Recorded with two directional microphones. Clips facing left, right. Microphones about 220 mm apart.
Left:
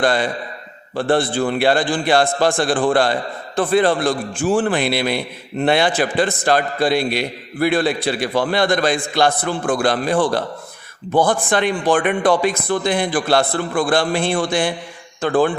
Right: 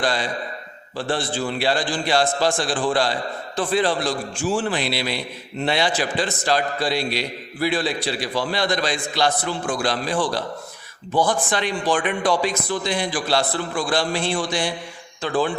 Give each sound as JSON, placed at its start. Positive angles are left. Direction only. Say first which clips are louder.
{"t": 0.0, "sound": "a man's voice", "louder": "left 5 dB", "side_deg": 55}